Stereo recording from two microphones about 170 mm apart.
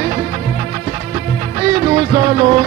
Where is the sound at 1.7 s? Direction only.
35° right (ahead or behind).